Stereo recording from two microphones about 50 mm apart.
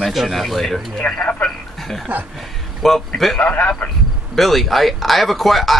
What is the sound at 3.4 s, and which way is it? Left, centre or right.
Speech, left.